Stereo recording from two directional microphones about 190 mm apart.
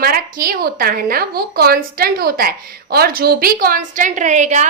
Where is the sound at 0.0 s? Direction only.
50° right (ahead or behind).